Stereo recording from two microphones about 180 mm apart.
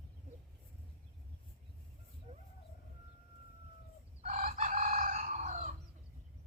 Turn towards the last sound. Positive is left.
turn(degrees=-40)  # may be behind; listen again after turning